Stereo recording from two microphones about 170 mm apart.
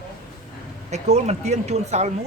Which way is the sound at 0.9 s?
40° right (ahead or behind).